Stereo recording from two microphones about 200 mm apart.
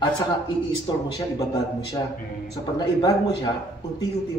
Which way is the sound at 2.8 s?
20° left (ahead or behind).